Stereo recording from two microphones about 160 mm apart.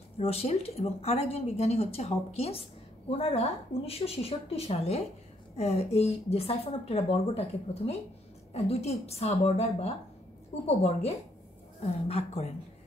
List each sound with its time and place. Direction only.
0.2 s speech: 40° left (ahead or behind)